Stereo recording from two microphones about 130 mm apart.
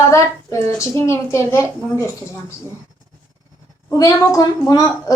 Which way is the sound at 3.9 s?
30° left (ahead or behind).